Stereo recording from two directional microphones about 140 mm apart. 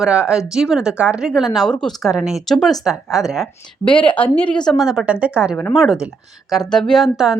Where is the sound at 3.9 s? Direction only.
35° left (ahead or behind).